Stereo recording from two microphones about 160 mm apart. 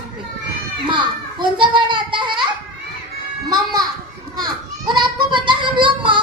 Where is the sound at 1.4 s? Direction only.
30° right (ahead or behind).